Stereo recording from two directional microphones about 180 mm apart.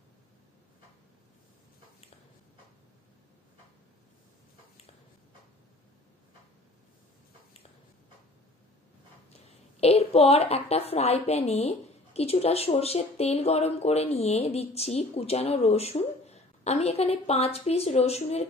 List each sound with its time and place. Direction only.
9.8 s a woman's voice: 35° left (ahead or behind)